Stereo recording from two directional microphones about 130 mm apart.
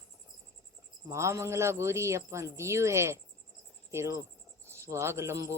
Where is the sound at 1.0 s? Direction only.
20° right (ahead or behind).